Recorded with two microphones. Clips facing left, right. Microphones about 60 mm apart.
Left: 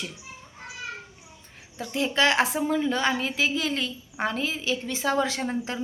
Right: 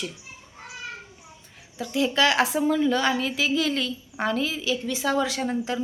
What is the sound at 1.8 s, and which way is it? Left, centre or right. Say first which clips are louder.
A woman's voice: right 2 dB; left.